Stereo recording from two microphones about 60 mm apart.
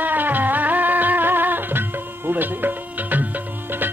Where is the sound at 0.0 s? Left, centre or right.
Right.